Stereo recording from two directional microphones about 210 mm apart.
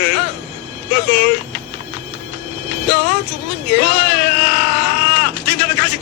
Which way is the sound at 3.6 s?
50° left (ahead or behind).